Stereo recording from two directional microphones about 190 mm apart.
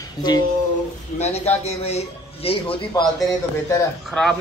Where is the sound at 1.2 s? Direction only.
35° left (ahead or behind).